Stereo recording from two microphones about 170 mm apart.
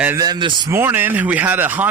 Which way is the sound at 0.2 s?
25° right (ahead or behind).